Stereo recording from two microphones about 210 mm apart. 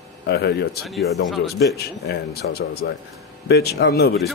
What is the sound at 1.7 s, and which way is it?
A man's voice, 50° left (ahead or behind).